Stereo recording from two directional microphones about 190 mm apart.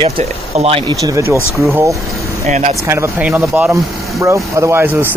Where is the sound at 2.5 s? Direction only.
40° right (ahead or behind).